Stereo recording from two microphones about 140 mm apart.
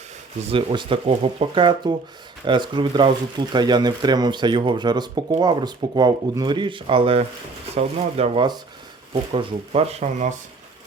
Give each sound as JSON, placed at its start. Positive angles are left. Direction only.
{"t": 0.5, "sound": "speech", "side_deg": -35}